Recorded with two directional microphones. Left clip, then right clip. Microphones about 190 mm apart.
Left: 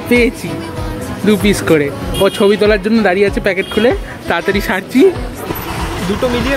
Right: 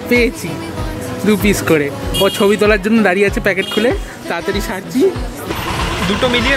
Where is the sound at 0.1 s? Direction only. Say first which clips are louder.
Left 2 dB; centre (ahead or behind).